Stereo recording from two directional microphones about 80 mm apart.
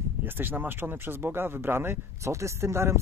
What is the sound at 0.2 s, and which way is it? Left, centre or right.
Speech, right.